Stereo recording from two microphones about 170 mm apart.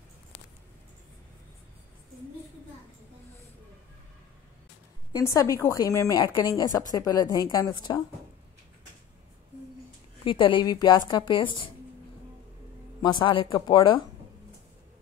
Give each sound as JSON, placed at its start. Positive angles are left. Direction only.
{"t": 5.1, "sound": "a woman's voice", "side_deg": 20}
{"t": 10.2, "sound": "a woman's voice", "side_deg": 30}
{"t": 13.0, "sound": "a woman's voice", "side_deg": 25}